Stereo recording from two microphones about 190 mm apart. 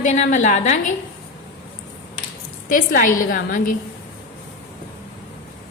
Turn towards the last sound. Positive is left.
turn(degrees=45)  # may be behind; listen again after turning